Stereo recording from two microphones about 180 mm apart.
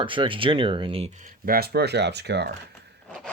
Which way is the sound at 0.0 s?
30° right (ahead or behind).